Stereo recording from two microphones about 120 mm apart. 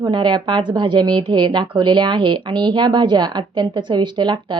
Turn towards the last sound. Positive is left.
turn(degrees=-40)  # may be behind; listen again after turning